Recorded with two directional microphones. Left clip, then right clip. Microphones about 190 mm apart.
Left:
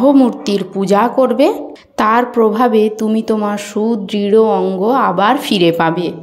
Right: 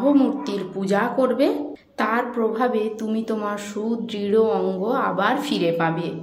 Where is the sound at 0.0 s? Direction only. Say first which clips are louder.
Left 8 dB; 35° left (ahead or behind).